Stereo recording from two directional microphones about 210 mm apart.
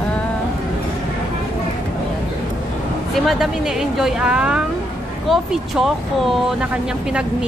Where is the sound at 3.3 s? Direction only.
Centre (ahead or behind).